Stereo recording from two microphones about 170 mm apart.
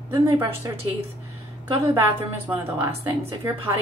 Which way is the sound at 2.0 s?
15° right (ahead or behind).